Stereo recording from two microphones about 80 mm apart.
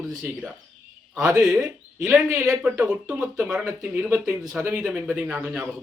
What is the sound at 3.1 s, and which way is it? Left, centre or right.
Speech, centre.